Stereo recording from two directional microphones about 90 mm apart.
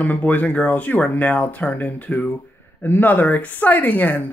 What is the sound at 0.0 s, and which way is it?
Speech, 15° left (ahead or behind).